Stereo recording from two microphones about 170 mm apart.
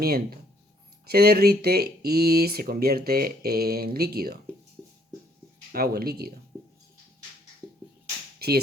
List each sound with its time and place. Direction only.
0.0 s speech: 65° right (ahead or behind)
5.7 s speech: 60° right (ahead or behind)
8.4 s speech: 65° right (ahead or behind)